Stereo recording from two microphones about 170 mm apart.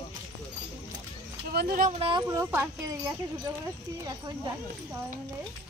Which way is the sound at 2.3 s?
15° right (ahead or behind).